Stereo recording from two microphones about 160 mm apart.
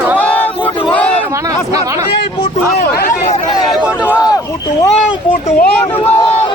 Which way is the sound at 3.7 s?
10° right (ahead or behind).